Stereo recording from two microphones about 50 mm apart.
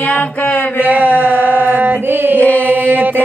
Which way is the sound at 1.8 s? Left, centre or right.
Right.